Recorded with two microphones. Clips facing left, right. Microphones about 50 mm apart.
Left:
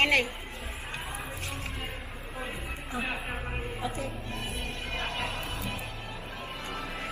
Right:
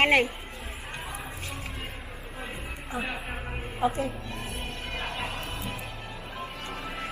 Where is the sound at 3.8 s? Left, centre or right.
Right.